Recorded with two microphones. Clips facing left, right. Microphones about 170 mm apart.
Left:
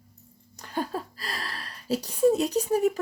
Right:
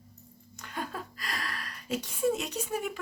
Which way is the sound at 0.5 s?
35° left (ahead or behind).